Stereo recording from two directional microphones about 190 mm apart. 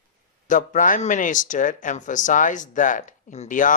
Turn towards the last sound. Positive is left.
turn(degrees=45)  # may be behind; listen again after turning